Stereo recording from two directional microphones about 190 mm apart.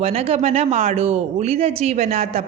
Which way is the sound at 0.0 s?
30° right (ahead or behind).